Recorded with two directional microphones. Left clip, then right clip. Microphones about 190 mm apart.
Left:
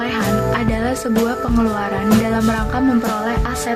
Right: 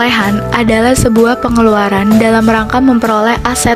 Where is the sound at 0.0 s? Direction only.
45° right (ahead or behind).